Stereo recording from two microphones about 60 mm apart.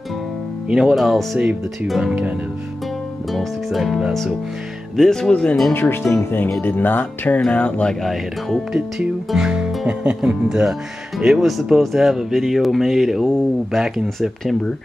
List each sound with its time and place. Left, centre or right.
0.7 s speech: centre
1.4 s speech: right
1.9 s speech: centre
3.3 s speech: centre
4.9 s speech: centre
5.3 s speech: centre
5.7 s speech: left
8.0 s speech: centre
9.3 s speech: centre